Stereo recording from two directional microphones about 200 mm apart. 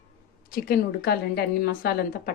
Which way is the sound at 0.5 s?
50° left (ahead or behind).